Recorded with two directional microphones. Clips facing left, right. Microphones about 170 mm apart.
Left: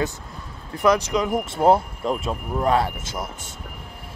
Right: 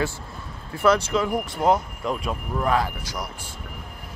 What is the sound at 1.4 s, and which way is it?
Speech, 30° left (ahead or behind).